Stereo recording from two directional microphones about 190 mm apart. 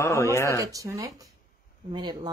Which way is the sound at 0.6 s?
15° right (ahead or behind).